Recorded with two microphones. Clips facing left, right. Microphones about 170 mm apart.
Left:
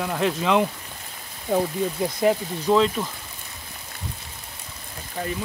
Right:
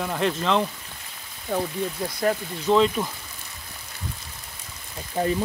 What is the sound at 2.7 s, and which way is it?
Speech, 5° right (ahead or behind).